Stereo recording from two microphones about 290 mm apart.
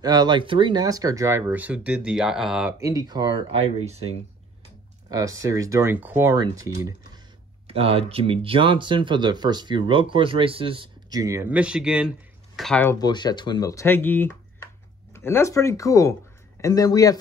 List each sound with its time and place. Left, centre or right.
0.0 s speech: centre
5.1 s speech: centre